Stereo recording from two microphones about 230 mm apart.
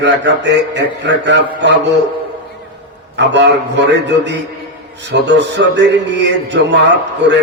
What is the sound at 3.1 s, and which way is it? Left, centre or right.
A man's voice, right.